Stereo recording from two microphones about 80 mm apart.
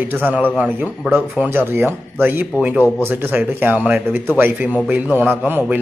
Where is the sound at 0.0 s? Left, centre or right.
Right.